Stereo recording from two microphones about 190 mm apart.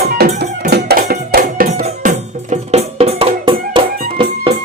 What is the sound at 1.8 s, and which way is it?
Music, 40° right (ahead or behind).